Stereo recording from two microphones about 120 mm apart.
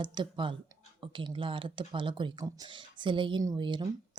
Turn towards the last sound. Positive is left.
turn(degrees=-40)  # may be behind; listen again after turning